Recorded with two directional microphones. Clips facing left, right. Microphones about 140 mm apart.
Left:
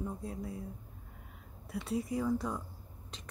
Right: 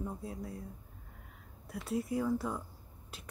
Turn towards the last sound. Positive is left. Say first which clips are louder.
# left 1 dB
turn(degrees=-5)  # may be behind; listen again after turning